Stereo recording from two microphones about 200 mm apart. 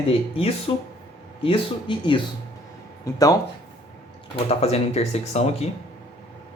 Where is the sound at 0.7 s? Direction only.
25° left (ahead or behind).